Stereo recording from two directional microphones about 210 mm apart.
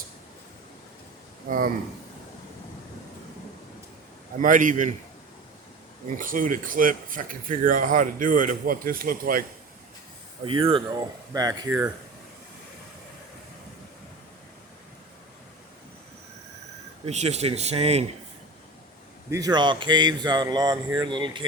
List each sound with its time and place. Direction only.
1.5 s speech: 40° right (ahead or behind)
4.4 s speech: 40° right (ahead or behind)
6.1 s speech: 40° right (ahead or behind)
10.4 s speech: 25° right (ahead or behind)
17.1 s speech: 30° right (ahead or behind)
19.3 s speech: 20° right (ahead or behind)